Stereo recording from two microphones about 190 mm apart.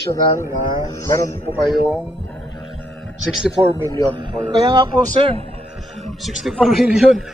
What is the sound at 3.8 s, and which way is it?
A man's voice, 25° right (ahead or behind).